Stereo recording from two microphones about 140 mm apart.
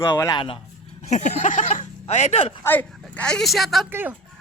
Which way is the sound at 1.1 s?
60° left (ahead or behind).